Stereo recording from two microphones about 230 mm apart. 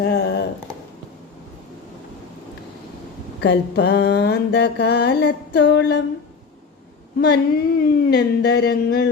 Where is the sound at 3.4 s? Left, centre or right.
Left.